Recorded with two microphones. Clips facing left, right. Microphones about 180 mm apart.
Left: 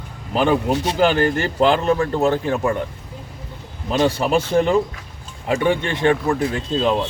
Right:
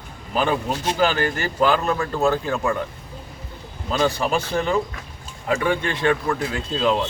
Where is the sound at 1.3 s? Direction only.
25° left (ahead or behind).